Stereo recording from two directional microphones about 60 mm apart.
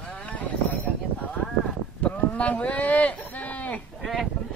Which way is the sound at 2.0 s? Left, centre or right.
Left.